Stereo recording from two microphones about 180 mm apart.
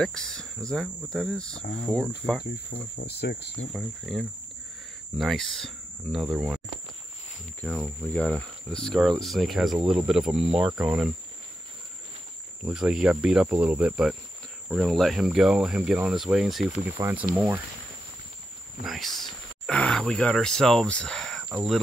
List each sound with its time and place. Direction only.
0.0 s speech: 5° left (ahead or behind)
3.0 s speech: 65° left (ahead or behind)
3.7 s speech: centre (ahead or behind)
7.6 s speech: centre (ahead or behind)
12.6 s speech: 5° right (ahead or behind)
18.9 s speech: centre (ahead or behind)